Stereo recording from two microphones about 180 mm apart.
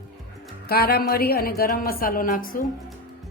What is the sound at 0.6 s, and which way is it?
A woman's voice, 60° left (ahead or behind).